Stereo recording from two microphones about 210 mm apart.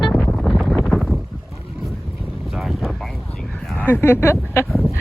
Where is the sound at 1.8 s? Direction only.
Centre (ahead or behind).